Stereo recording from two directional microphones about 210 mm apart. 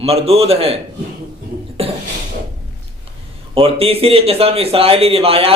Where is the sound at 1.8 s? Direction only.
25° right (ahead or behind).